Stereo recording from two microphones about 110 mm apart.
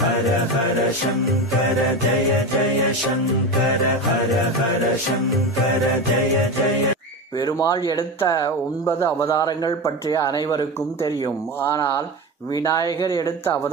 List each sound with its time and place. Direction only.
7.3 s speech: 35° left (ahead or behind)
11.7 s speech: 25° left (ahead or behind)